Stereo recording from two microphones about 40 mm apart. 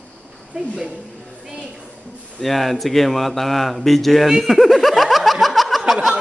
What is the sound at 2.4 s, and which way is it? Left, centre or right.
Speech, centre.